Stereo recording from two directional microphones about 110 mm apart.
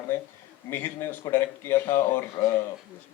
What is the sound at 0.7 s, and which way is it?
Speech, 20° left (ahead or behind).